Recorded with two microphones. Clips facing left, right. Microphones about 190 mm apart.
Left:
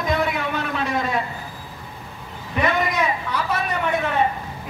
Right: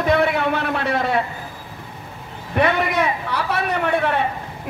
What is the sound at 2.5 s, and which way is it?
Speech, 65° right (ahead or behind).